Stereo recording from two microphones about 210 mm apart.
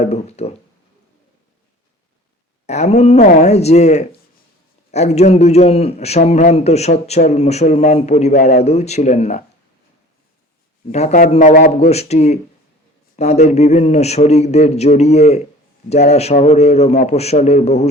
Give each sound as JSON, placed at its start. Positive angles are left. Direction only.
{"t": 0.0, "sound": "a man's voice", "side_deg": 30}
{"t": 2.6, "sound": "a man's voice", "side_deg": 30}
{"t": 10.9, "sound": "a man's voice", "side_deg": 35}
{"t": 11.8, "sound": "a man's voice", "side_deg": 30}